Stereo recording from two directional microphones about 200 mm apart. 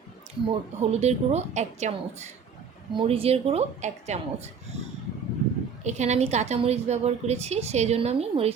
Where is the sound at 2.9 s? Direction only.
30° right (ahead or behind).